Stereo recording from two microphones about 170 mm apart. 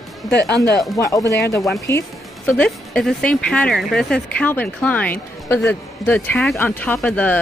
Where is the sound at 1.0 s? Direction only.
20° left (ahead or behind).